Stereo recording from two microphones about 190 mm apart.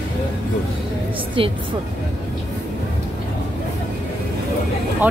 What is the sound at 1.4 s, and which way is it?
Speech, 30° right (ahead or behind).